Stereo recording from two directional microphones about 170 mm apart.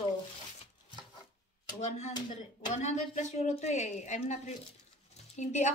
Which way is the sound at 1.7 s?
45° left (ahead or behind).